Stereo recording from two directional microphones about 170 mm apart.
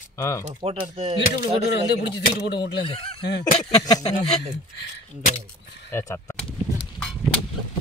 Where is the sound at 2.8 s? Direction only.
35° left (ahead or behind).